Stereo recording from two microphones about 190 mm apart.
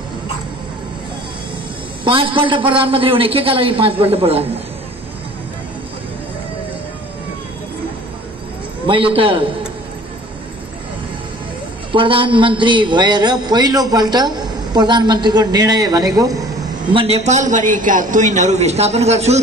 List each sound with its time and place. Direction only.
2.0 s a man's voice: 25° right (ahead or behind)
8.8 s a man's voice: 25° right (ahead or behind)
11.9 s a man's voice: 25° right (ahead or behind)
16.9 s a man's voice: 30° right (ahead or behind)